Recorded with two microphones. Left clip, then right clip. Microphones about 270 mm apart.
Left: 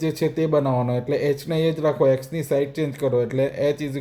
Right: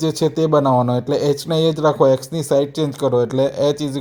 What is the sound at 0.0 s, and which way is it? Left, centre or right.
A man's voice, right.